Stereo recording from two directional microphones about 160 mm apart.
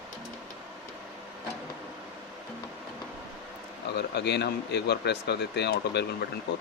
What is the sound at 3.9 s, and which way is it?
Speech, 90° left.